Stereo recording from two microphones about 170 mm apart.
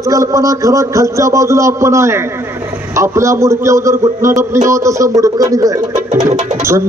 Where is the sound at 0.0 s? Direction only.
20° right (ahead or behind).